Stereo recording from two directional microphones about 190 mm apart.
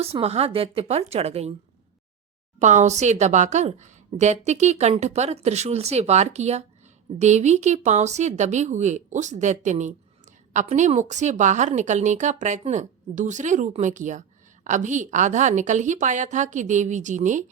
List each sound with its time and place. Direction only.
0.0 s a woman's voice: 30° right (ahead or behind)
2.6 s a woman's voice: 40° right (ahead or behind)